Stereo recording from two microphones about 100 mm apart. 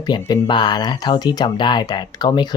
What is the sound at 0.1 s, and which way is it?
Speech, 50° left (ahead or behind).